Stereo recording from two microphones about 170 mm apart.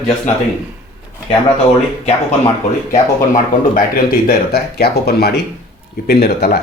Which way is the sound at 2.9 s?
55° left (ahead or behind).